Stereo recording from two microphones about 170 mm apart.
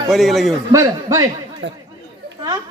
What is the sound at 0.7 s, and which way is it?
Speech, 20° right (ahead or behind).